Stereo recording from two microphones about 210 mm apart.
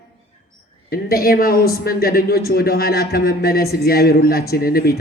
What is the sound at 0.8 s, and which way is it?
Speech, 45° left (ahead or behind).